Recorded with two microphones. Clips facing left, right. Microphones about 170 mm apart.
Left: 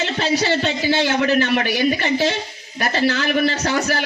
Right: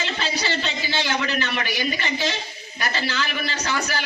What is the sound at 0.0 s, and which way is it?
Speech, 50° left (ahead or behind).